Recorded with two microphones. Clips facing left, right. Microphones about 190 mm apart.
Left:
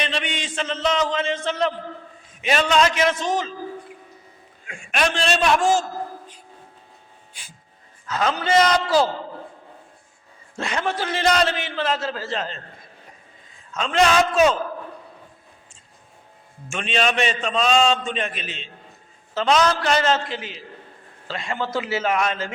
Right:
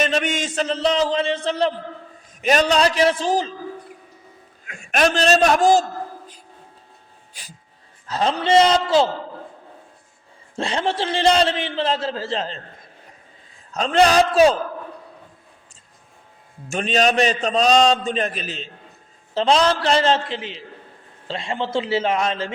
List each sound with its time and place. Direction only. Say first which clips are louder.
0.0 s a man's voice: right 6 dB; 45° right (ahead or behind)
4.9 s a man's voice: right 5 dB; 40° right (ahead or behind)
8.0 s a man's voice: right 2 dB; 30° right (ahead or behind)
10.6 s a man's voice: right 3 dB; 30° right (ahead or behind)
13.7 s a man's voice: right 3 dB; 35° right (ahead or behind)
16.6 s a man's voice: right 4 dB; 40° right (ahead or behind)